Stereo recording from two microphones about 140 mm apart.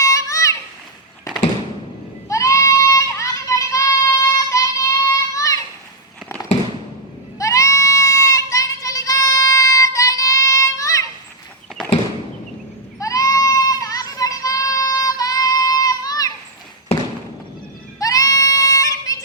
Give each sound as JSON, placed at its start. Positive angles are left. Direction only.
{"t": 0.0, "sound": "children playing", "side_deg": 25}
{"t": 2.3, "sound": "a sound", "side_deg": 20}
{"t": 7.3, "sound": "goat", "side_deg": 20}
{"t": 13.0, "sound": "child singing", "side_deg": 25}
{"t": 18.0, "sound": "child singing", "side_deg": 25}